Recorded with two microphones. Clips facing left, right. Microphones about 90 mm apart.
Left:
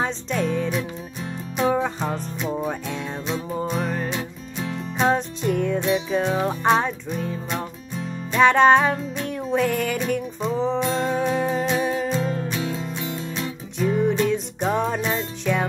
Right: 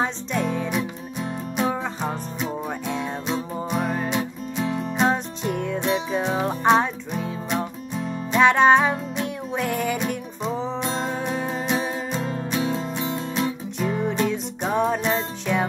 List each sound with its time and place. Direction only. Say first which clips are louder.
0.0 s music: even; 5° right (ahead or behind)
1.6 s music: left 4 dB; 5° right (ahead or behind)
6.2 s music: right 3 dB; 15° right (ahead or behind)
11.6 s music: left 3 dB; 10° right (ahead or behind)
13.7 s music: left 4 dB; 5° right (ahead or behind)